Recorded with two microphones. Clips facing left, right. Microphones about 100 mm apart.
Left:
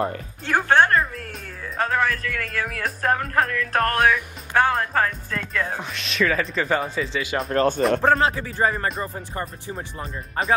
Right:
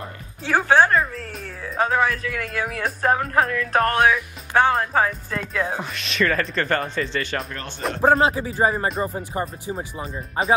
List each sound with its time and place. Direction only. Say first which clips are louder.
0.5 s speech: right 1 dB; 5° right (ahead or behind)
7.4 s speech: left 14 dB; 40° left (ahead or behind)
8.2 s speech: right 2 dB; 20° right (ahead or behind)